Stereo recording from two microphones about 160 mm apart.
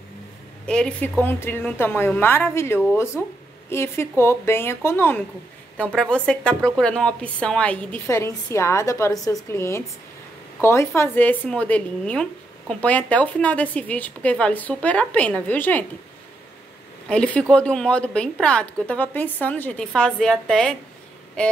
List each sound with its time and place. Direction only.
0.7 s speech: 5° left (ahead or behind)
17.1 s speech: 5° left (ahead or behind)